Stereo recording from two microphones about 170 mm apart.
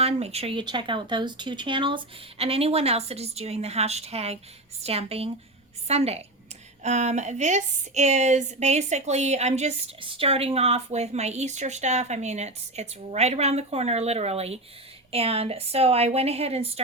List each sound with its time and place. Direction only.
0.0 s a woman's voice: 40° right (ahead or behind)